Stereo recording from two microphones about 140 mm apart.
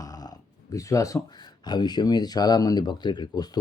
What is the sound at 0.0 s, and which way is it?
Speech, 25° left (ahead or behind).